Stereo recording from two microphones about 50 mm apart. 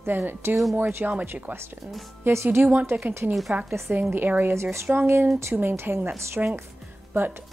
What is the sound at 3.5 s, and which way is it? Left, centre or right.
Speech, right.